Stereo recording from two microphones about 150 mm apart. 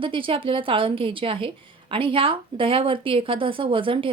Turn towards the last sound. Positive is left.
turn(degrees=-35)  # may be behind; listen again after turning